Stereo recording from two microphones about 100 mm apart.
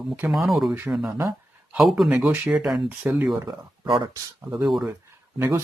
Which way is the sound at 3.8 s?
60° right (ahead or behind).